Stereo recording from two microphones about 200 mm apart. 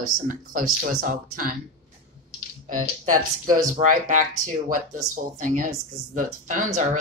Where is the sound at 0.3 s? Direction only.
40° right (ahead or behind).